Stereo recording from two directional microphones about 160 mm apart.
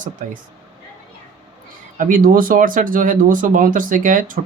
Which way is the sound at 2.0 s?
60° right (ahead or behind).